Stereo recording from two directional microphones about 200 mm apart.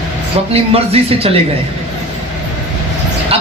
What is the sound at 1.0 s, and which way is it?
Speech, 30° right (ahead or behind).